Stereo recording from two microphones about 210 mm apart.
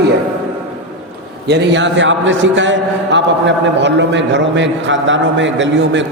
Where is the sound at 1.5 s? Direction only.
55° right (ahead or behind).